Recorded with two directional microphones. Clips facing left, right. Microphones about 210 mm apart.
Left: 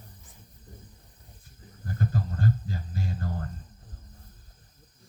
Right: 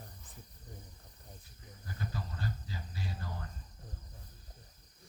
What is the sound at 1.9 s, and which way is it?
Cricket, 50° left (ahead or behind).